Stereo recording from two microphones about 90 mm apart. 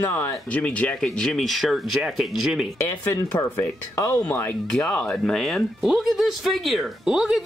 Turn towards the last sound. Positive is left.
turn(degrees=-5)  # may be behind; listen again after turning